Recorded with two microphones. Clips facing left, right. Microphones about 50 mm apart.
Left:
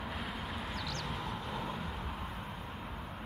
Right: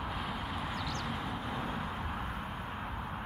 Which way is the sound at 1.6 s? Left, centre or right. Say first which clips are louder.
Right 2 dB; right.